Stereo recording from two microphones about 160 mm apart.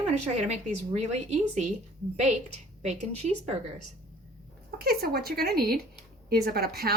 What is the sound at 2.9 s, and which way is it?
Speech, 45° right (ahead or behind).